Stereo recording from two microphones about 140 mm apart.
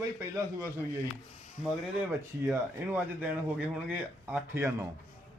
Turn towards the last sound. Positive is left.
turn(degrees=-20)  # may be behind; listen again after turning